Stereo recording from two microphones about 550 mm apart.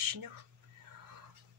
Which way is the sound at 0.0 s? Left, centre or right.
Right.